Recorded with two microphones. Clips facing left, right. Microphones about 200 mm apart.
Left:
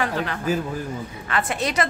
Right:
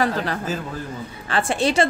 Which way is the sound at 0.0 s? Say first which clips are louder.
Right 2 dB; 35° right (ahead or behind).